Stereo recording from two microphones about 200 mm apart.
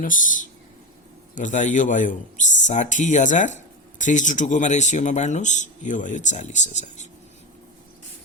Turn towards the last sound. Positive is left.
turn(degrees=35)  # may be behind; listen again after turning